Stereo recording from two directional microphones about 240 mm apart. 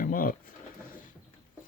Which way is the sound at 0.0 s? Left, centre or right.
Left.